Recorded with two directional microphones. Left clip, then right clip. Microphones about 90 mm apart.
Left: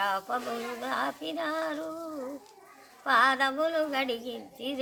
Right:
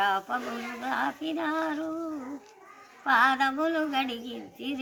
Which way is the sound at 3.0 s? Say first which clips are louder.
Right 1 dB; 50° left (ahead or behind).